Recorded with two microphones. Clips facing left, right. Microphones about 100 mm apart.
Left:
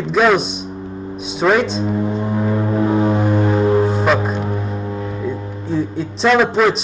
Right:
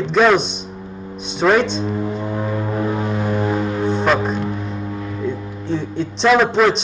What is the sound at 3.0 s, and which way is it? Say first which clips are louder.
Vehicle: left 4 dB; 30° left (ahead or behind).